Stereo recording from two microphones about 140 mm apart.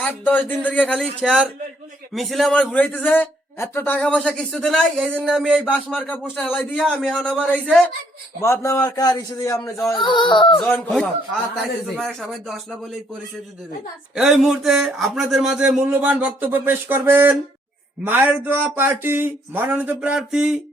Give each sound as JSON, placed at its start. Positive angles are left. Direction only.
{"t": 0.0, "sound": "a man's voice", "side_deg": 10}
{"t": 6.7, "sound": "a man's voice", "side_deg": 0}
{"t": 8.4, "sound": "a man's voice", "side_deg": 20}
{"t": 10.0, "sound": "speech", "side_deg": 35}
{"t": 11.5, "sound": "speech", "side_deg": 0}
{"t": 14.2, "sound": "speech", "side_deg": -5}